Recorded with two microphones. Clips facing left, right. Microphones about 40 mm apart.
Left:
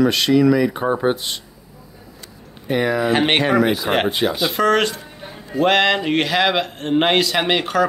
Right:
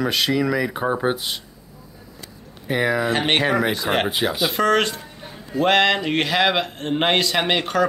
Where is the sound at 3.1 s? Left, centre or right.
Centre.